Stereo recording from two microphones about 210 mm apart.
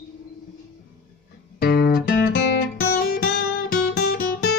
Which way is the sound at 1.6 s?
45° left (ahead or behind).